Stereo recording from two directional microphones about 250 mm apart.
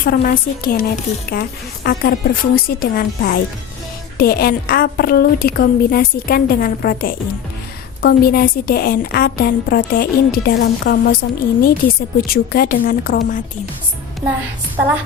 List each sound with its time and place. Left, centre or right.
0.0 s a woman's voice: left